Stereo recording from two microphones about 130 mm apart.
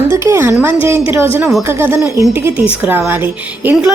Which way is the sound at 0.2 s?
20° right (ahead or behind).